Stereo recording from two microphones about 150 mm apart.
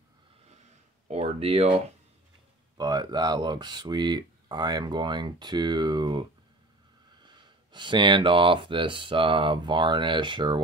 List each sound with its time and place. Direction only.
1.0 s a sound: 45° right (ahead or behind)
2.8 s speech: 25° right (ahead or behind)
7.2 s speech: 30° right (ahead or behind)